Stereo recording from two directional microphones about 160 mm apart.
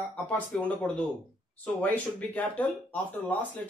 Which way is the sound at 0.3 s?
10° left (ahead or behind).